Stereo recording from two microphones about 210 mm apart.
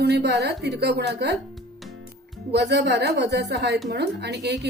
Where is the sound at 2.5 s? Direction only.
55° right (ahead or behind).